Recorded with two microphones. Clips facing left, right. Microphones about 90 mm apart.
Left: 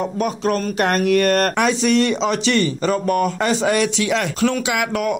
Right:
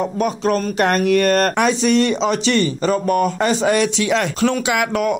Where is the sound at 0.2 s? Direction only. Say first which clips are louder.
Right 2 dB; 25° right (ahead or behind).